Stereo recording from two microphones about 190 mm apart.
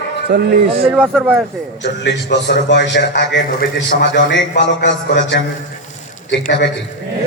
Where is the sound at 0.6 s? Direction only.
30° right (ahead or behind).